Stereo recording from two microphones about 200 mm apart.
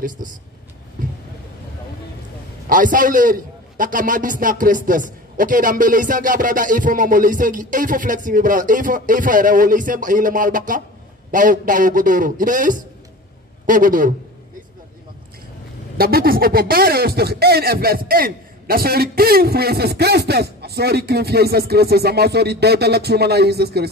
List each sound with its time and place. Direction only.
0.2 s speech: 45° right (ahead or behind)
2.7 s a man's voice: 40° right (ahead or behind)
16.0 s speech: 50° right (ahead or behind)